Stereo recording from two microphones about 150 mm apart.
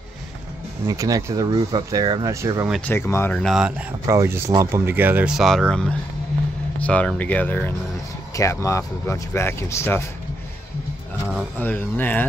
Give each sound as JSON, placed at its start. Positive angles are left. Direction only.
{"t": 0.9, "sound": "speech", "side_deg": -25}
{"t": 2.9, "sound": "speech", "side_deg": 15}
{"t": 3.3, "sound": "speech", "side_deg": 0}
{"t": 4.1, "sound": "speech", "side_deg": -20}
{"t": 11.5, "sound": "speech", "side_deg": 10}